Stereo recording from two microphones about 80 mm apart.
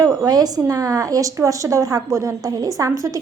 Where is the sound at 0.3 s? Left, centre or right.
Right.